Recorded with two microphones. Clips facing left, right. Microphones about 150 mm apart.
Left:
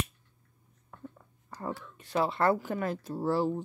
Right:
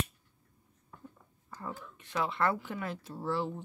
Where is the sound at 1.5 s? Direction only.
80° left.